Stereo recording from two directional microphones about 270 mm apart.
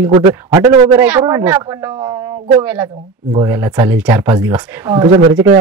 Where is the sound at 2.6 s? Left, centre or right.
Centre.